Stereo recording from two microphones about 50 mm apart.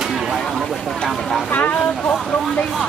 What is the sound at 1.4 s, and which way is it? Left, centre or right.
Speech, left.